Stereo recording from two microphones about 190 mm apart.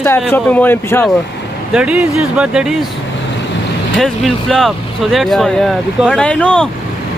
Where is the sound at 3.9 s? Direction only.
Centre (ahead or behind).